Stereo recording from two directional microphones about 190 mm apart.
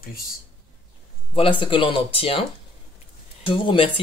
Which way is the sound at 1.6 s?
25° left (ahead or behind).